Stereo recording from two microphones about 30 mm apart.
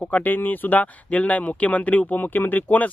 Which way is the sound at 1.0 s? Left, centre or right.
Left.